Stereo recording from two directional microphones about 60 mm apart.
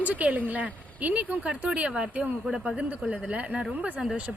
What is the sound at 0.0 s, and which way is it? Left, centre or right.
Speech, right.